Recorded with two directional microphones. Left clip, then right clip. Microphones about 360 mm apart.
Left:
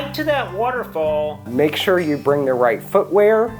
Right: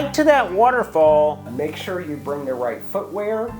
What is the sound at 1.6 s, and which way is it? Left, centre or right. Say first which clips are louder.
Speech: left 14 dB; left.